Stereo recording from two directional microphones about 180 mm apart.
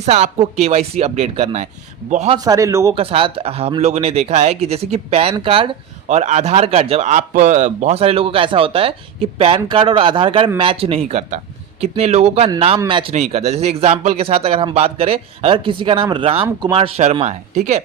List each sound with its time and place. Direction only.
0.0 s speech: 40° right (ahead or behind)
2.4 s speech: 20° right (ahead or behind)
2.9 s a man's voice: 30° right (ahead or behind)